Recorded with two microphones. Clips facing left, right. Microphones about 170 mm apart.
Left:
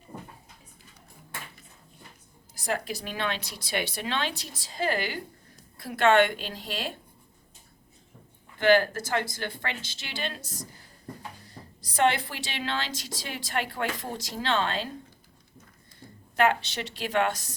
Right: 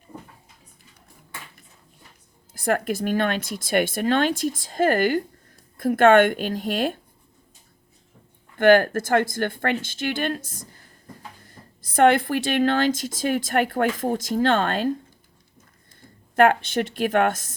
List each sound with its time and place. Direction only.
2.5 s a woman's voice: 55° right (ahead or behind)
8.5 s a woman's voice: 55° right (ahead or behind)
16.3 s a woman's voice: 50° right (ahead or behind)